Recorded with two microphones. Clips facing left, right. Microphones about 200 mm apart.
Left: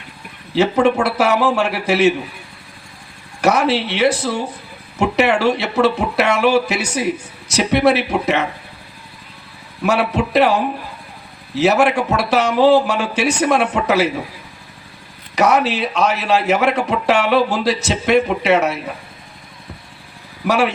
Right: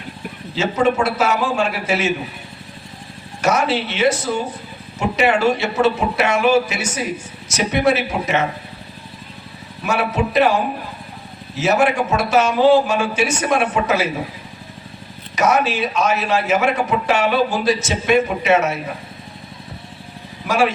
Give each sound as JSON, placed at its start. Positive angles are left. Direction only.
{"t": 0.5, "sound": "a man's voice", "side_deg": 65}
{"t": 3.4, "sound": "a man's voice", "side_deg": 65}
{"t": 9.8, "sound": "a man's voice", "side_deg": 65}
{"t": 11.6, "sound": "a man's voice", "side_deg": 65}
{"t": 15.4, "sound": "a man's voice", "side_deg": 65}
{"t": 20.4, "sound": "speech", "side_deg": 65}